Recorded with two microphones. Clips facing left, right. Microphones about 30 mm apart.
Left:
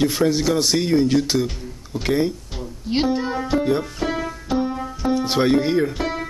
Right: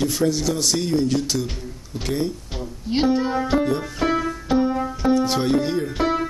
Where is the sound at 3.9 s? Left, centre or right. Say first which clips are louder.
Right 3 dB; centre.